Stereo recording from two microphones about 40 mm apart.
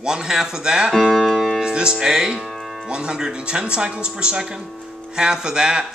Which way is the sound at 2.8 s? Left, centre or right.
Right.